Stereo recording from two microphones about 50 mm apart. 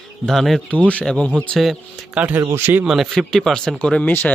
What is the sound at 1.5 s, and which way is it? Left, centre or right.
Speech, centre.